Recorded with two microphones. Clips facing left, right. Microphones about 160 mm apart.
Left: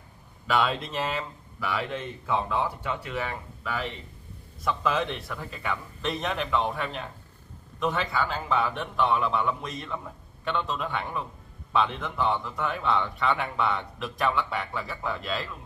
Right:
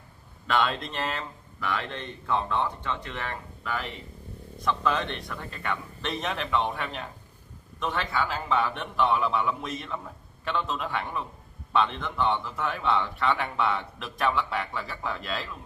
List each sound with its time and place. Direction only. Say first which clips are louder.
0.5 s a man's voice: left 1 dB; centre (ahead or behind)